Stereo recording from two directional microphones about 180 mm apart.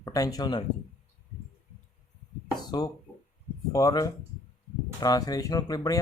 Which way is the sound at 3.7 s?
20° left (ahead or behind).